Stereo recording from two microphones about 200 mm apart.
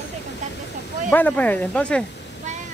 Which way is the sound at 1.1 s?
10° left (ahead or behind).